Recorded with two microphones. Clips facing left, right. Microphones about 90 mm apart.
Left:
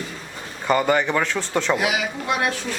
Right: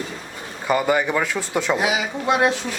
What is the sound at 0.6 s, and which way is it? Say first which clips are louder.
Speech: even; 5° right (ahead or behind).